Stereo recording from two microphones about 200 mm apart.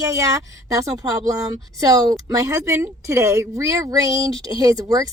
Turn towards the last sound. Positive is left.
turn(degrees=-20)  # may be behind; listen again after turning